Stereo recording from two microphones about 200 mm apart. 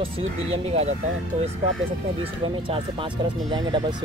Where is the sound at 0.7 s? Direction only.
30° right (ahead or behind).